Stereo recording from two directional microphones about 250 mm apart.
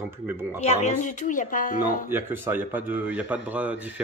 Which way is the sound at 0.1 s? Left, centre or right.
Centre.